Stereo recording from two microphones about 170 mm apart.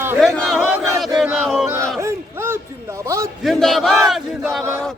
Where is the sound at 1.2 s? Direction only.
Centre (ahead or behind).